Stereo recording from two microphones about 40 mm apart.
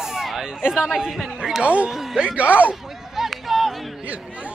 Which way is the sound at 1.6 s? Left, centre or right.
Right.